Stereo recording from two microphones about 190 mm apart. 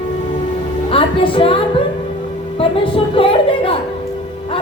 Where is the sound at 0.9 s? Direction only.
30° left (ahead or behind).